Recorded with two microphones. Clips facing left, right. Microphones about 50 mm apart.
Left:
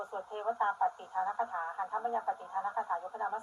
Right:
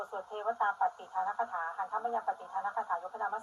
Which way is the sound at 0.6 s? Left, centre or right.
Centre.